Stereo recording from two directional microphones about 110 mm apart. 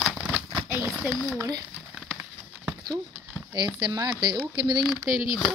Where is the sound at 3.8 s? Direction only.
40° right (ahead or behind).